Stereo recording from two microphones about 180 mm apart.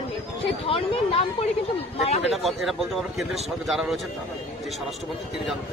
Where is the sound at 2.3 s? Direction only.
Centre (ahead or behind).